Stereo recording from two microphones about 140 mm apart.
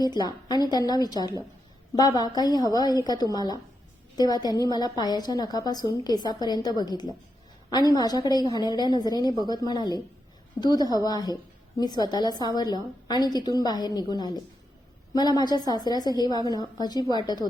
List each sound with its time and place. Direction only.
0.0 s a woman's voice: 30° left (ahead or behind)